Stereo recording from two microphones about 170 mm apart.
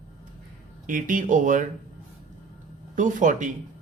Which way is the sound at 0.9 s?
50° right (ahead or behind).